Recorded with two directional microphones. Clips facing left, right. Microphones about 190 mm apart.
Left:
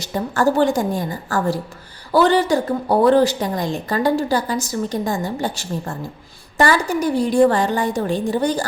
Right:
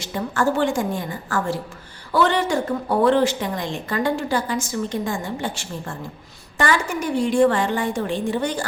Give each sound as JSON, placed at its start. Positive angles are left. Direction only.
{"t": 0.0, "sound": "a woman's voice", "side_deg": 40}